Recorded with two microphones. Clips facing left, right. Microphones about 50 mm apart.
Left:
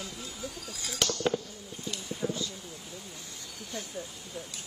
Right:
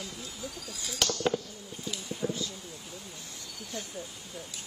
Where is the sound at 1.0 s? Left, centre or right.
Centre.